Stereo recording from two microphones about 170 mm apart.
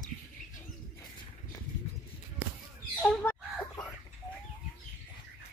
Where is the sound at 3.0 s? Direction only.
10° left (ahead or behind).